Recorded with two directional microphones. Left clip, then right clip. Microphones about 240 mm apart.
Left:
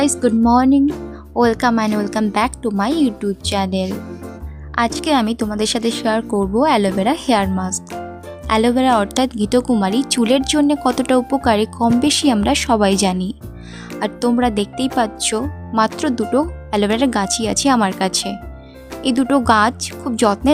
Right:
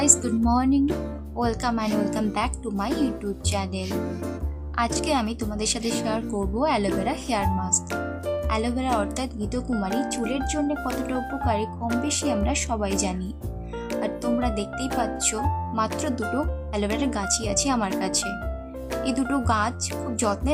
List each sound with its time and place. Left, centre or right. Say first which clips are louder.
0.0 s speech: left 7 dB; left